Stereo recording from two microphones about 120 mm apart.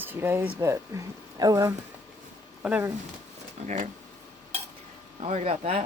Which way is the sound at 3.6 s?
90° right.